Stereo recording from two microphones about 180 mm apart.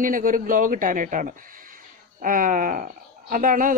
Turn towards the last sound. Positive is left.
turn(degrees=-50)  # may be behind; listen again after turning